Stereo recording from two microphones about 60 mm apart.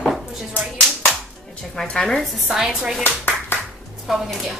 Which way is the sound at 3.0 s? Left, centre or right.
Left.